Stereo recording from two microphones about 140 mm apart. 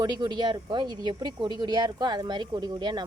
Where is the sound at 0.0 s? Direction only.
30° right (ahead or behind).